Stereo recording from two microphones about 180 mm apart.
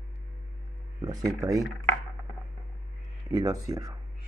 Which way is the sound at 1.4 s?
20° right (ahead or behind).